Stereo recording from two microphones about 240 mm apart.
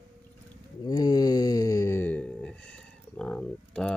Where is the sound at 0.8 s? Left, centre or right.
Centre.